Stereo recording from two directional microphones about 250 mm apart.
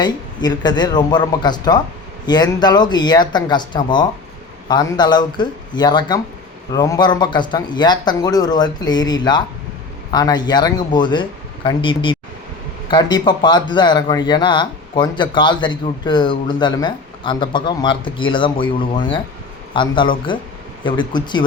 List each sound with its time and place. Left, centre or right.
0.0 s speech: centre